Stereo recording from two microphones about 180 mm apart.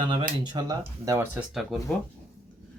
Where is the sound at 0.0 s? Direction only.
25° right (ahead or behind); by 1.8 s 5° right (ahead or behind).